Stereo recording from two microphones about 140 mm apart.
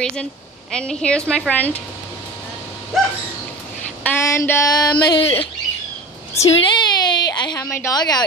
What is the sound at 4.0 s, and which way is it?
Speech, 15° left (ahead or behind).